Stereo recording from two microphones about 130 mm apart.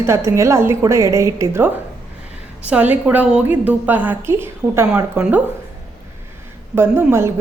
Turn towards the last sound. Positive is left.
turn(degrees=-20)  # may be behind; listen again after turning